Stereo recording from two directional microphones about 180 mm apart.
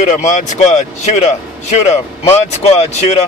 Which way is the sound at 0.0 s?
40° left (ahead or behind).